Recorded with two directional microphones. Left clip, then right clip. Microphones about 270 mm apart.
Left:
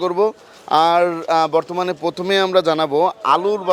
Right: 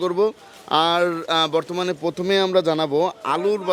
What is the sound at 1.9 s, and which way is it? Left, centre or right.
A man's voice, centre.